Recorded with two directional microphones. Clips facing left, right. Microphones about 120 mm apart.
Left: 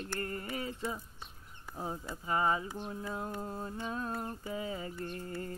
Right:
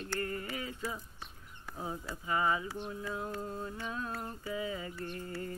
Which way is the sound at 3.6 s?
30° left (ahead or behind).